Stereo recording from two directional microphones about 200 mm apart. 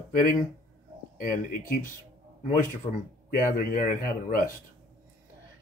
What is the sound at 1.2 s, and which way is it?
Speech, 45° left (ahead or behind).